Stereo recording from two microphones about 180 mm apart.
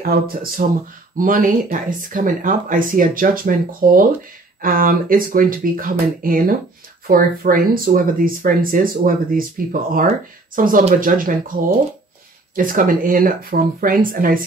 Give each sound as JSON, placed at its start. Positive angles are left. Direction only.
{"t": 0.0, "sound": "speech", "side_deg": -55}
{"t": 12.5, "sound": "speech", "side_deg": -50}